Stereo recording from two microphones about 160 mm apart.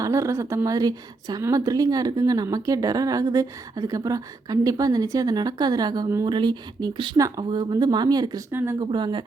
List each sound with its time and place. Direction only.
0.0 s a woman's voice: 20° right (ahead or behind)